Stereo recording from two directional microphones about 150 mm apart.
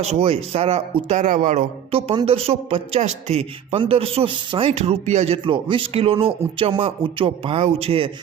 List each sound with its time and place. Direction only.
0.0 s speech: 45° right (ahead or behind)
1.9 s a woman's voice: 40° right (ahead or behind)